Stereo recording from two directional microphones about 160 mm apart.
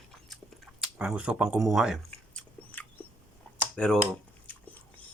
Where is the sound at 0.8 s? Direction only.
5° right (ahead or behind).